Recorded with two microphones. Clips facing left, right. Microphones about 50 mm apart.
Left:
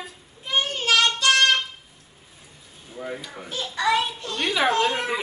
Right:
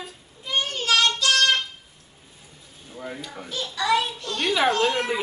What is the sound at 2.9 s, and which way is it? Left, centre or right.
Stir, centre.